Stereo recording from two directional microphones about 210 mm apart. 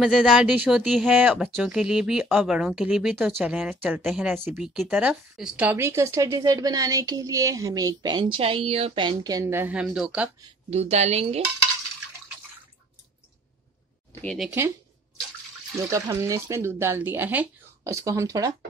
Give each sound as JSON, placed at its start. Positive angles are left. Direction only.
{"t": 0.0, "sound": "speech", "side_deg": 0}
{"t": 10.7, "sound": "a woman's voice", "side_deg": -30}
{"t": 14.2, "sound": "speech", "side_deg": 0}
{"t": 15.9, "sound": "speech", "side_deg": -15}